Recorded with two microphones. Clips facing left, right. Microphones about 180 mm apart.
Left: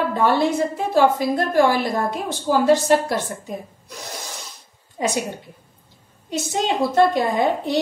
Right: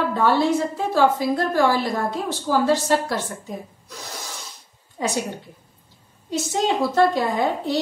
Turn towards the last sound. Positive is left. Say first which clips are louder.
# left 2 dB
turn(degrees=20)  # may be behind; listen again after turning